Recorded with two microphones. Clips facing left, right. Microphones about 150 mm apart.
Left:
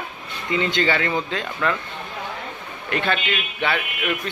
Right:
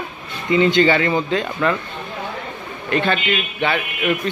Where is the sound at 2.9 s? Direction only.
Centre (ahead or behind).